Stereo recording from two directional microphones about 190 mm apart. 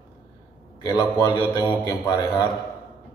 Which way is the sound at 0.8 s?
20° left (ahead or behind).